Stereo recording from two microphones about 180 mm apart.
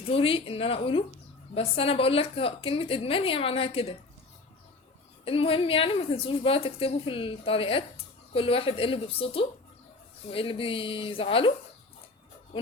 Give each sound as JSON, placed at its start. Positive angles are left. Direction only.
{"t": 0.0, "sound": "a woman's voice", "side_deg": 30}
{"t": 5.2, "sound": "a woman's voice", "side_deg": 30}